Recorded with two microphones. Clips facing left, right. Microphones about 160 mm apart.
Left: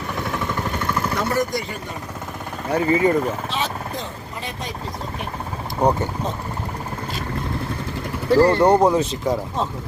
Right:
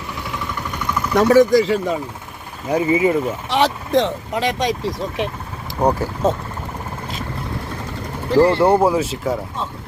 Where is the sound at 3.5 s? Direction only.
80° right.